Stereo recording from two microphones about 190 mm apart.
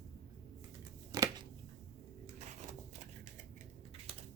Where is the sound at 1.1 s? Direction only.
20° right (ahead or behind).